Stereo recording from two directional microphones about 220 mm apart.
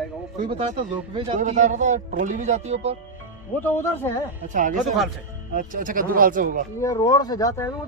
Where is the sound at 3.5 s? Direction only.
10° left (ahead or behind).